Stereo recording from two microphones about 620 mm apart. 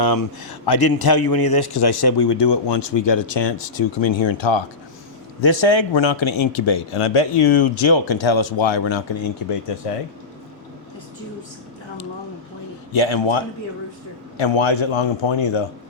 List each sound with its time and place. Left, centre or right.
0.0 s a man's voice: left
12.9 s speech: left